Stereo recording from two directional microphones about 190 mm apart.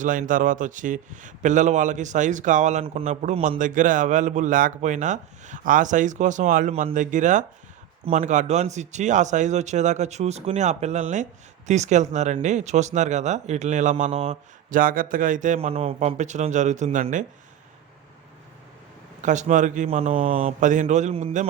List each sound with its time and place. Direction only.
0.0 s speech: 45° right (ahead or behind)
19.2 s speech: 40° right (ahead or behind)